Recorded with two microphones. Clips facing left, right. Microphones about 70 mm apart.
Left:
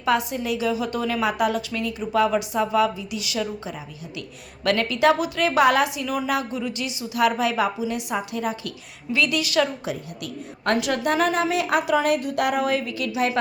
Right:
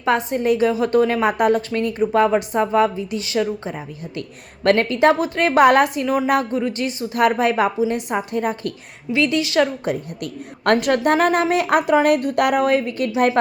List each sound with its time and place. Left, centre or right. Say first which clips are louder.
0.0 s a woman's voice: right 4 dB; right
4.6 s a woman's voice: right 4 dB; right
9.1 s a woman's voice: right 4 dB; right
10.6 s a woman's voice: right 6 dB; right